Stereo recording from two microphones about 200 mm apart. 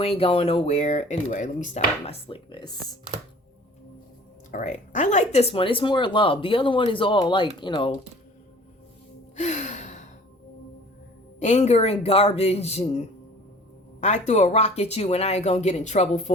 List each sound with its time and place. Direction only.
0.0 s speech: 30° left (ahead or behind)
4.5 s speech: 40° left (ahead or behind)
9.3 s gasp: 35° left (ahead or behind)
11.3 s speech: 35° left (ahead or behind)